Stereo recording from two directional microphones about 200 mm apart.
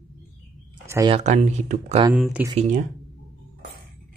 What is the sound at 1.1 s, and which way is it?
Speech, 30° right (ahead or behind).